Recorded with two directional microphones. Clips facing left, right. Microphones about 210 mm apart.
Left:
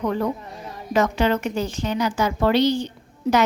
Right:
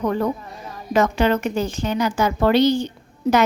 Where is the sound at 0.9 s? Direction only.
50° right (ahead or behind).